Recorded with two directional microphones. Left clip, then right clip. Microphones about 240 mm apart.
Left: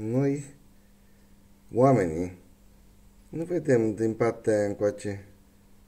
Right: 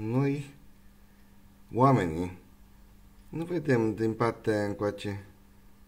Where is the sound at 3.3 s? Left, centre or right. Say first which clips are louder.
Left 4 dB; right.